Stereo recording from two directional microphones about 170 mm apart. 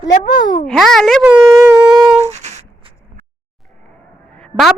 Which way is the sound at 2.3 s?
40° right (ahead or behind).